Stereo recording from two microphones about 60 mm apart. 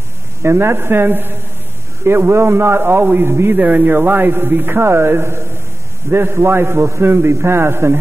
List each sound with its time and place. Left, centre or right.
0.4 s a man's voice: right
3.5 s a man's voice: right